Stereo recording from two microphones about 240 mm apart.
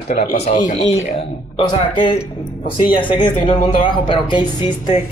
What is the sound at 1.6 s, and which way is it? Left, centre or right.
A man's voice, centre.